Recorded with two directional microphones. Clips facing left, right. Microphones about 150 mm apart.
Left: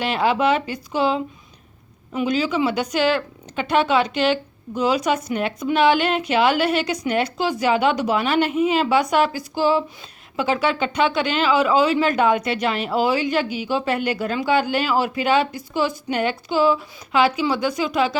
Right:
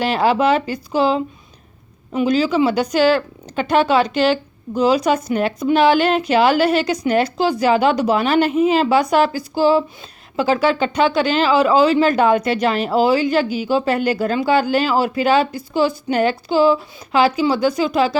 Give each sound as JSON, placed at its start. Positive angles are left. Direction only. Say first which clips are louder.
{"t": 0.0, "sound": "speech", "louder": "right 3 dB", "side_deg": -40}